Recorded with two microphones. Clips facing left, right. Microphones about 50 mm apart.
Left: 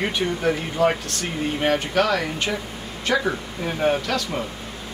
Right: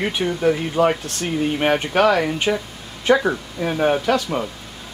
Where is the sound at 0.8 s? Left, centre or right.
Centre.